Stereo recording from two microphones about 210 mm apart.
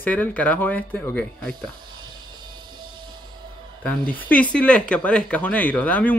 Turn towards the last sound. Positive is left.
turn(degrees=5)  # may be behind; listen again after turning